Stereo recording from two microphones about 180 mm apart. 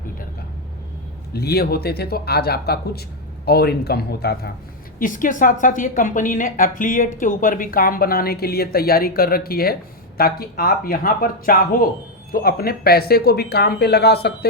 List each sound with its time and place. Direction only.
1.3 s speech: 60° left (ahead or behind)
4.9 s a woman's voice: 45° left (ahead or behind); by 14.3 s 60° left (ahead or behind)